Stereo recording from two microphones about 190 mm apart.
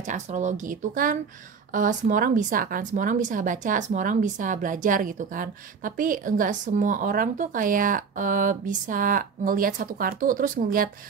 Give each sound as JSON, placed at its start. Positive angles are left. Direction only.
{"t": 0.0, "sound": "speech", "side_deg": -40}